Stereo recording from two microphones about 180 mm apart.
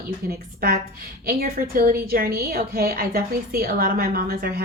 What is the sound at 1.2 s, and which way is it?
A woman's voice, 55° right (ahead or behind).